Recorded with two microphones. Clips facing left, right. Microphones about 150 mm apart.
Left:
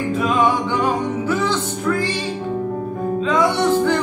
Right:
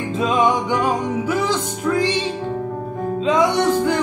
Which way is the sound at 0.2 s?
20° right (ahead or behind).